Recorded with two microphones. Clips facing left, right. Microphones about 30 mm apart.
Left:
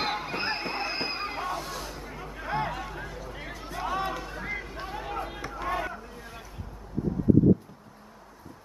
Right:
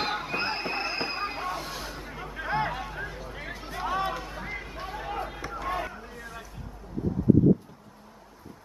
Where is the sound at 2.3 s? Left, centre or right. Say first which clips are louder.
Right 2 dB; centre.